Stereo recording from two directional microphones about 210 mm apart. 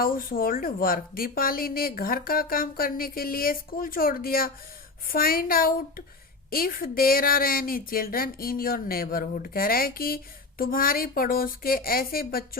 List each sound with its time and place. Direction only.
0.0 s speech: 45° left (ahead or behind)